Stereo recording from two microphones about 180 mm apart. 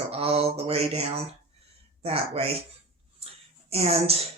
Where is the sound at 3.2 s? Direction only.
35° right (ahead or behind).